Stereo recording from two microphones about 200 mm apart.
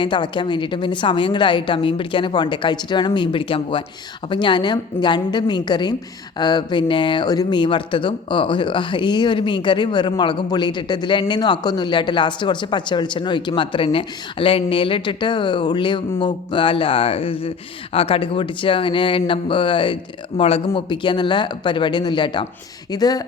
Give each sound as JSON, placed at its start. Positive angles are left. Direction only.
{"t": 0.0, "sound": "speech", "side_deg": 25}